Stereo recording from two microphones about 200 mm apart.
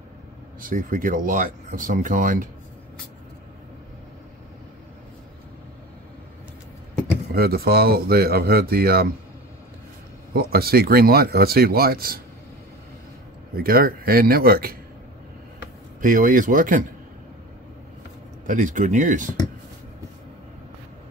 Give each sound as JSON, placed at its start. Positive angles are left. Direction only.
{"t": 0.6, "sound": "speech", "side_deg": -45}
{"t": 7.3, "sound": "speech", "side_deg": -50}
{"t": 10.3, "sound": "speech", "side_deg": -50}
{"t": 13.6, "sound": "speech", "side_deg": -45}
{"t": 16.0, "sound": "speech", "side_deg": -40}
{"t": 18.5, "sound": "speech", "side_deg": -40}